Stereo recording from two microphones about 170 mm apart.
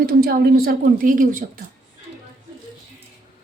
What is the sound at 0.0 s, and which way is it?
A woman's voice, 65° right (ahead or behind).